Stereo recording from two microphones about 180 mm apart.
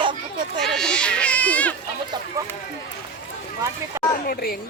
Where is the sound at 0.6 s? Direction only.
Centre (ahead or behind).